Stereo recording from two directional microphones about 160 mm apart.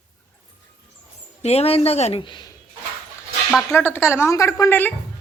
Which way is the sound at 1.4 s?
40° left (ahead or behind).